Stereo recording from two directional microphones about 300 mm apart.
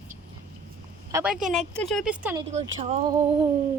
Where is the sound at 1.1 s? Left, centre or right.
Centre.